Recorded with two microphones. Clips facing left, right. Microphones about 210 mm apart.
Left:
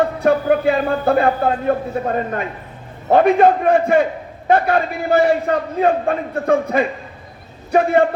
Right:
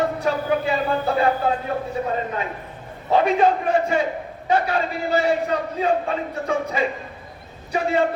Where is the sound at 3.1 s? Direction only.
55° left (ahead or behind).